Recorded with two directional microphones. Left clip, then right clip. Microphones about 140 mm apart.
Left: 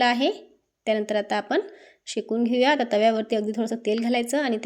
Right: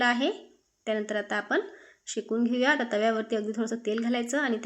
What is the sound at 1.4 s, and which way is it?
A woman's voice, 50° left (ahead or behind).